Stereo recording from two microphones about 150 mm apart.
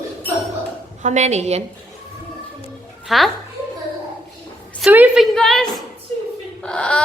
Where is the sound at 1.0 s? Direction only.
50° right (ahead or behind).